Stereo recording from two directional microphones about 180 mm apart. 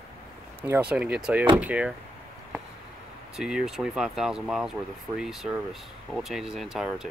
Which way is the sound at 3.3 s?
5° right (ahead or behind).